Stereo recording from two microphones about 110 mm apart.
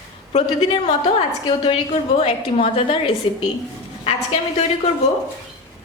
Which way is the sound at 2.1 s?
60° left (ahead or behind).